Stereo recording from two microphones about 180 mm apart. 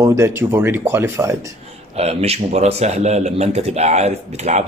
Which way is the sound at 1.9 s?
35° right (ahead or behind).